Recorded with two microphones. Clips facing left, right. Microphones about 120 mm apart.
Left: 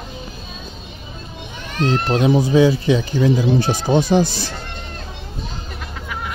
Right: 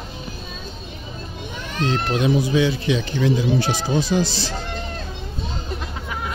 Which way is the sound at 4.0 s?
50° left (ahead or behind).